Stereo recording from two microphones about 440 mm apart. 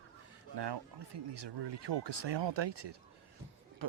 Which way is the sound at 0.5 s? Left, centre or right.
Right.